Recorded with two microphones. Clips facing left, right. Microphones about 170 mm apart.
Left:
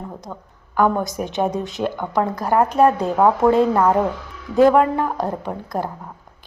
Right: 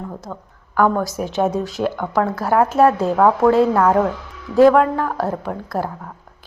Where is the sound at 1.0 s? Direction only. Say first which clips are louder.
Right 2 dB; centre (ahead or behind); by 5.3 s 15° left (ahead or behind).